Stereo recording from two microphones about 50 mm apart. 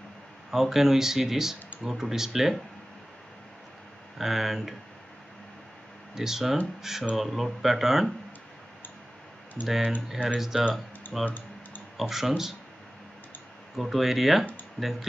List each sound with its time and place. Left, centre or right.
0.5 s speech: centre
4.2 s speech: centre
6.1 s speech: centre
9.6 s speech: left
10.5 s speech: centre
11.2 s typing: left
12.0 s speech: centre
13.7 s speech: centre